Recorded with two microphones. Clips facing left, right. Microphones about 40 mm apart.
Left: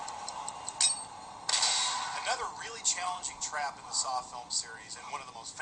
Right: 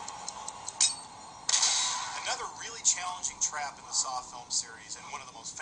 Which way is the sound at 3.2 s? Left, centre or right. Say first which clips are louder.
Left 1 dB; centre.